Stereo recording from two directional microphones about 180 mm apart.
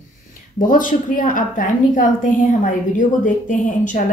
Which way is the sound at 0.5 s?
45° left (ahead or behind).